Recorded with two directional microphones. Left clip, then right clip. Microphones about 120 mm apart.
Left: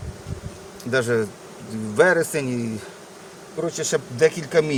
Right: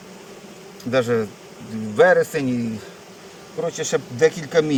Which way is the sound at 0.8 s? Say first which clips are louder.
Right 1 dB; 90° left.